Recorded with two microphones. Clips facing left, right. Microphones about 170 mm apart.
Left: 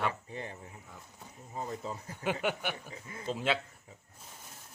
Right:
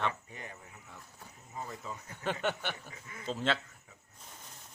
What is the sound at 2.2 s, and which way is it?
Speech, 10° left (ahead or behind).